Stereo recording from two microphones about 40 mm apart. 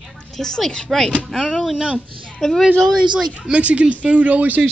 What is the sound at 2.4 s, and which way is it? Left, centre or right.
Speech, centre.